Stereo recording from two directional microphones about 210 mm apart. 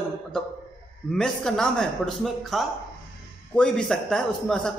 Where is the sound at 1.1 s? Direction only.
5° left (ahead or behind).